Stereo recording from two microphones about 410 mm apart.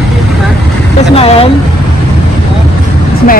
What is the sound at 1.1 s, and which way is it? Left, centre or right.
Vehicle, centre.